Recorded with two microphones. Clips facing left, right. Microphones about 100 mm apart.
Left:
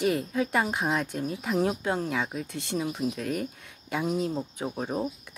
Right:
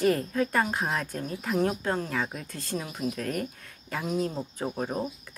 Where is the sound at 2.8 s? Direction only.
5° left (ahead or behind).